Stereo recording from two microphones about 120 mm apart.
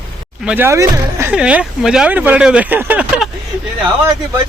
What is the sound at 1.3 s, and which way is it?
Speech, 10° right (ahead or behind).